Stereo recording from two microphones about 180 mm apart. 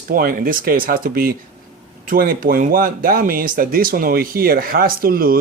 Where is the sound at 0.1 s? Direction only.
55° right (ahead or behind).